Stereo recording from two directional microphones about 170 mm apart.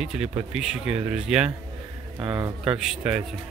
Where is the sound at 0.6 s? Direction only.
5° right (ahead or behind).